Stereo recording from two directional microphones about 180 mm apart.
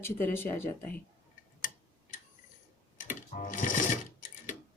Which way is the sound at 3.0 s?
45° left (ahead or behind).